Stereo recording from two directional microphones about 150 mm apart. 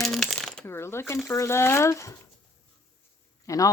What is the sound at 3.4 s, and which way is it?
Speech, 20° left (ahead or behind).